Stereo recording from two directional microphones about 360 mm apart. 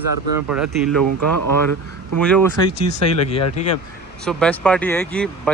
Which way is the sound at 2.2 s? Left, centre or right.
Centre.